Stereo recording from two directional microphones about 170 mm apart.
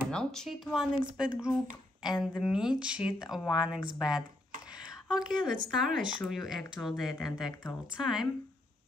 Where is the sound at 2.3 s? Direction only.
5° right (ahead or behind).